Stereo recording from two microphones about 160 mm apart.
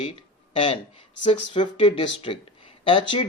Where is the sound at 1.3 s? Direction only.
30° left (ahead or behind).